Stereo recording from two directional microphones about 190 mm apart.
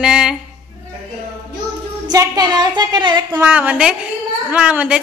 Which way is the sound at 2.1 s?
20° right (ahead or behind).